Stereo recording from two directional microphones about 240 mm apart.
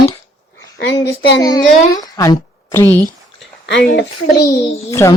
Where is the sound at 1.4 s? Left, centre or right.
Centre.